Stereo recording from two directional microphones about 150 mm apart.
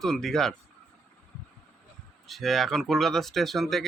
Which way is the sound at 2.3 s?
Centre (ahead or behind).